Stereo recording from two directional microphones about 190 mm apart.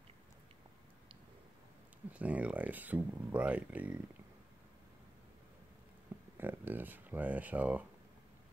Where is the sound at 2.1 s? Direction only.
5° right (ahead or behind).